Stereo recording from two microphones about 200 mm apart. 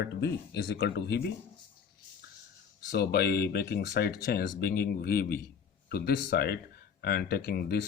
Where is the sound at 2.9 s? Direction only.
55° left (ahead or behind).